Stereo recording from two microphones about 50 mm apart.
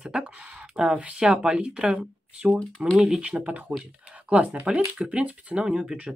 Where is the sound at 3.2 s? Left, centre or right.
Right.